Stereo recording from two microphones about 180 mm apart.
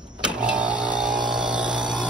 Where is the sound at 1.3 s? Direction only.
5° right (ahead or behind).